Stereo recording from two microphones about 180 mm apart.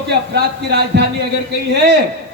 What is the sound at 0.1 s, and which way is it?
Speech, 65° right (ahead or behind).